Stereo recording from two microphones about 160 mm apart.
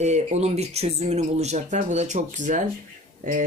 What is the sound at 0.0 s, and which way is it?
Speech, 45° right (ahead or behind).